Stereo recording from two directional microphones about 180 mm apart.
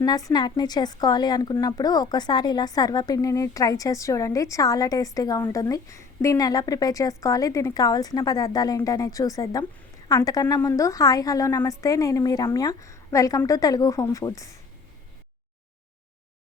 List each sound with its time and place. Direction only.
0.0 s a woman's voice: 20° left (ahead or behind)